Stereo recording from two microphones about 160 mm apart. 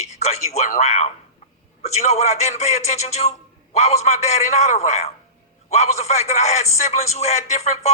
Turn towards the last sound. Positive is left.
turn(degrees=45)  # may be behind; listen again after turning